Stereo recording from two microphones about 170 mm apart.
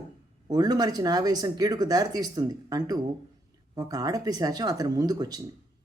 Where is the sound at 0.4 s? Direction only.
25° right (ahead or behind).